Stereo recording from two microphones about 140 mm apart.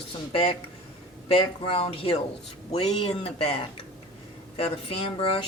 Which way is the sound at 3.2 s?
40° left (ahead or behind).